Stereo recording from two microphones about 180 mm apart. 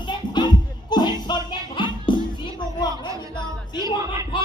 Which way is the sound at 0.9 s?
25° left (ahead or behind).